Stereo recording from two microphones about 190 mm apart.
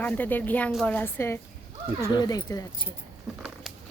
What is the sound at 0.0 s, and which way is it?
A woman's voice, 10° left (ahead or behind).